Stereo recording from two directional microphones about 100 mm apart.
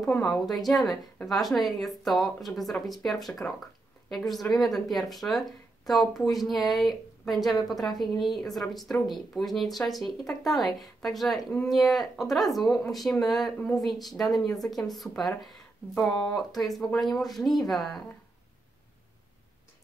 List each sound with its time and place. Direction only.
0.1 s a woman's voice: 15° left (ahead or behind)
0.5 s speech: centre (ahead or behind)